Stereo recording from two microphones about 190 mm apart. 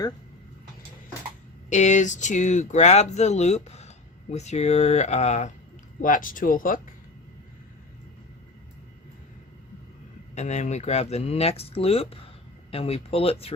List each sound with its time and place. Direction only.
1.7 s speech: 40° left (ahead or behind)
10.3 s speech: 35° left (ahead or behind)